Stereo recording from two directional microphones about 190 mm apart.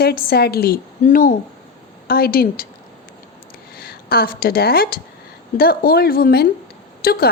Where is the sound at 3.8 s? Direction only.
50° left (ahead or behind).